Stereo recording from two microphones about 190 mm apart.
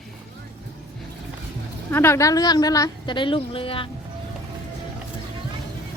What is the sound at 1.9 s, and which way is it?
A woman's voice, 15° left (ahead or behind).